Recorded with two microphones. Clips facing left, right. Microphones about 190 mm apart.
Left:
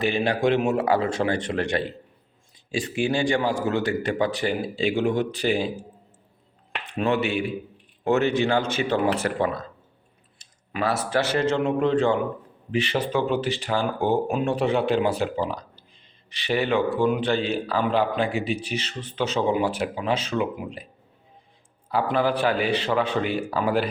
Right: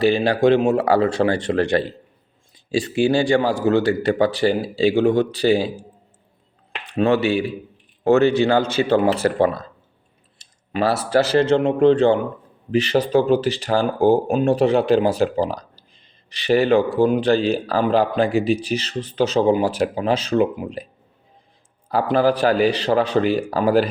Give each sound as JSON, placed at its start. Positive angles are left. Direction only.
{"t": 0.0, "sound": "speech", "side_deg": -35}
{"t": 7.0, "sound": "speech", "side_deg": -35}
{"t": 10.7, "sound": "speech", "side_deg": -35}
{"t": 22.1, "sound": "speech", "side_deg": -40}